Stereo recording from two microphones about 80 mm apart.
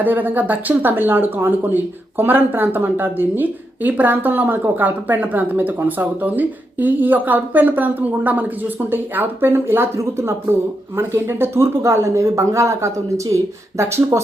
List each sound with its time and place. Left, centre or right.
0.0 s speech: right